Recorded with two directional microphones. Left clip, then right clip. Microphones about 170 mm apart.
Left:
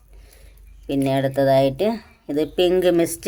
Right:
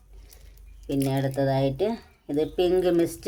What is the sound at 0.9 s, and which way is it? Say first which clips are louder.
Speech: left 6 dB; 20° left (ahead or behind).